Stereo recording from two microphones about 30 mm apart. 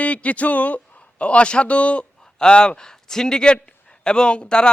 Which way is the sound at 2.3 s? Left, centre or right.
Left.